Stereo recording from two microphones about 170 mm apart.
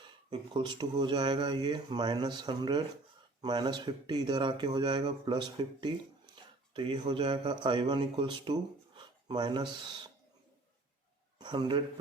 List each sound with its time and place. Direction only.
0.3 s speech: 25° right (ahead or behind)
11.3 s speech: 25° right (ahead or behind)